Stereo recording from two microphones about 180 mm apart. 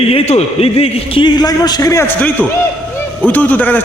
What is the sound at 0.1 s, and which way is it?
A man's voice, 35° left (ahead or behind).